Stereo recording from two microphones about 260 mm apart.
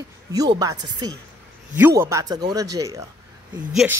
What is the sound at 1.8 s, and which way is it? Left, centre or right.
A man's voice, centre.